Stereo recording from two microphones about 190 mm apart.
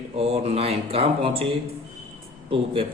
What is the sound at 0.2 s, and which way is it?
A man's voice, 30° right (ahead or behind).